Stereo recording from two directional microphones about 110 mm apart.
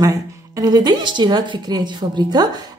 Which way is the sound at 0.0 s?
35° right (ahead or behind).